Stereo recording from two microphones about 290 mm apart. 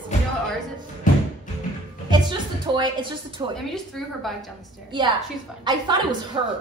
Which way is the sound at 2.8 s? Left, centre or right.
Centre.